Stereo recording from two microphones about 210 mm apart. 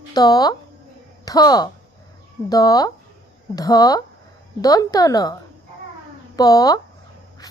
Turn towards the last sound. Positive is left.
turn(degrees=20)  # may be behind; listen again after turning